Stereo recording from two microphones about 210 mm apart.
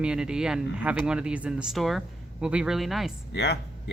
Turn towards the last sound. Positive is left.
turn(degrees=55)  # may be behind; listen again after turning